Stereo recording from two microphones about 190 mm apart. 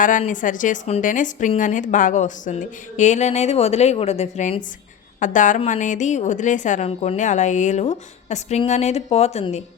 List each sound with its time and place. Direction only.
0.0 s a woman's voice: 45° left (ahead or behind)